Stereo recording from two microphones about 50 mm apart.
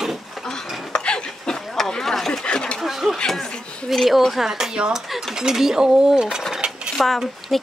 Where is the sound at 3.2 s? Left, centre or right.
Centre.